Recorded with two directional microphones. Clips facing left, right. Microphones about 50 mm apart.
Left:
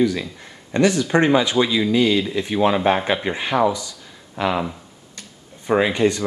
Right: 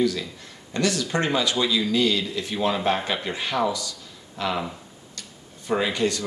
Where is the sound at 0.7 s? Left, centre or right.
Left.